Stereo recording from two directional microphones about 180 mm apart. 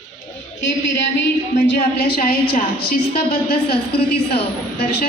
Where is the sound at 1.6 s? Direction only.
60° left (ahead or behind).